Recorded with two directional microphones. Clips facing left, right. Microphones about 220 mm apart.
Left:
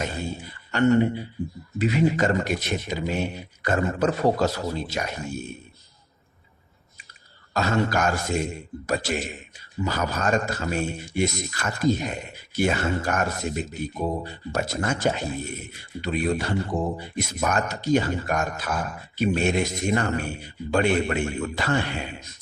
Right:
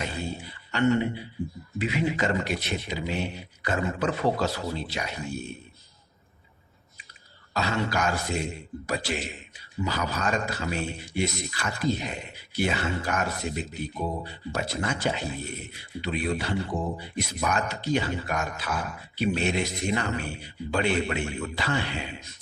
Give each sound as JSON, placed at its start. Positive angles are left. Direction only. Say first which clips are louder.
{"t": 0.4, "sound": "a man's voice", "louder": "left 3 dB", "side_deg": 45}
{"t": 7.5, "sound": "a man's voice", "louder": "left 4 dB", "side_deg": 45}